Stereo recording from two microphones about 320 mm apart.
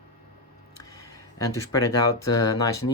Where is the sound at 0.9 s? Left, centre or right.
Centre.